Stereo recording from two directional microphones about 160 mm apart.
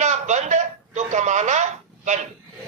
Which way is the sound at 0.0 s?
50° right (ahead or behind).